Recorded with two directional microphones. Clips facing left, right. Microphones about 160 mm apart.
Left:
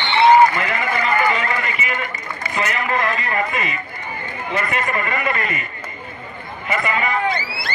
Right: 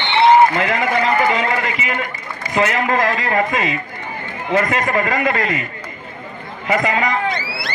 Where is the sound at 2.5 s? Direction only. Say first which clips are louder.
Right 5 dB; 90° right.